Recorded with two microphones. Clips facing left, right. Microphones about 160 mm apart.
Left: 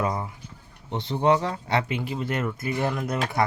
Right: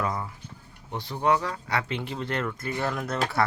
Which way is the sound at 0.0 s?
20° left (ahead or behind).